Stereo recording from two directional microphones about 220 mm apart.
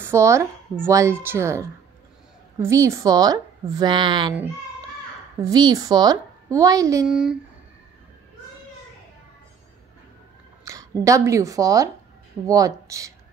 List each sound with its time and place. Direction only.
0.0 s a woman's voice: 10° right (ahead or behind)
5.4 s a woman's voice: 15° right (ahead or behind)
7.1 s speech: 5° right (ahead or behind)
10.6 s a woman's voice: 15° right (ahead or behind)